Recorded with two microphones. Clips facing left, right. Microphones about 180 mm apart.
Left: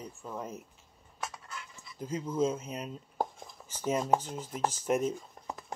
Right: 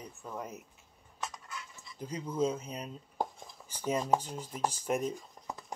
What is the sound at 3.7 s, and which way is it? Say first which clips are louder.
Speech: left 1 dB; 15° right (ahead or behind).